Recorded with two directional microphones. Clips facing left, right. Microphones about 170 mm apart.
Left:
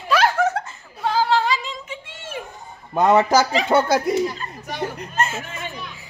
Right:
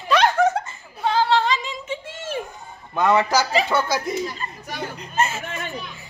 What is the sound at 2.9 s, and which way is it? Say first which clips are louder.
A man's voice: left 3 dB; 40° left (ahead or behind).